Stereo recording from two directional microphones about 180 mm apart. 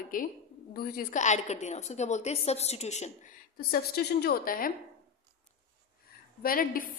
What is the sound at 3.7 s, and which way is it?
A woman's voice, 60° left (ahead or behind).